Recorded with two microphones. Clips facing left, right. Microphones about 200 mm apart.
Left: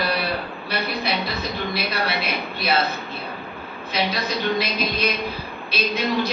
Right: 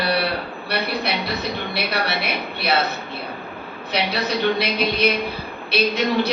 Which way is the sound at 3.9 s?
70° right (ahead or behind).